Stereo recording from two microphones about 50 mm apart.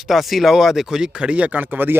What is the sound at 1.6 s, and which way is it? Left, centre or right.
Speech, right.